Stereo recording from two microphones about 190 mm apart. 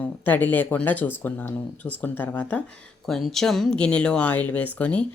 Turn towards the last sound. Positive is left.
turn(degrees=5)  # may be behind; listen again after turning